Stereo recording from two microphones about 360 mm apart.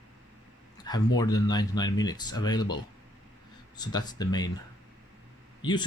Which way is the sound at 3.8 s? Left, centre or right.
Centre.